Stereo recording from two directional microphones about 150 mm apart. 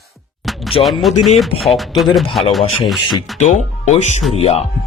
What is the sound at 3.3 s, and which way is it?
Speech, 50° left (ahead or behind).